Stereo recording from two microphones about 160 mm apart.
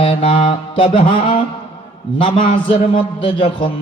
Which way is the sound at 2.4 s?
30° left (ahead or behind).